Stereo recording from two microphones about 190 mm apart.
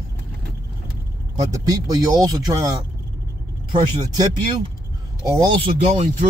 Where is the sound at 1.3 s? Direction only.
20° right (ahead or behind).